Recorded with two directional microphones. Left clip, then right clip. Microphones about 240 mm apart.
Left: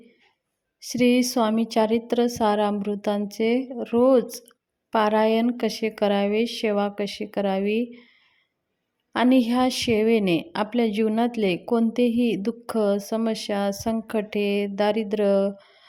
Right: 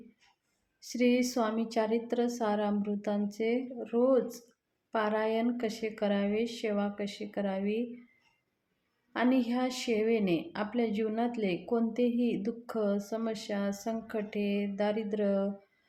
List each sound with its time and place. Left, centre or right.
0.8 s a woman's voice: left
9.1 s a woman's voice: left